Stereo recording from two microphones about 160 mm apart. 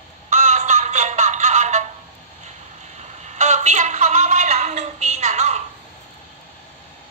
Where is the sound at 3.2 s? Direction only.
50° right (ahead or behind).